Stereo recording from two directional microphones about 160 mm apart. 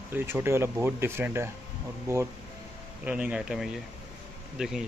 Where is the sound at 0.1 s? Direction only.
15° right (ahead or behind).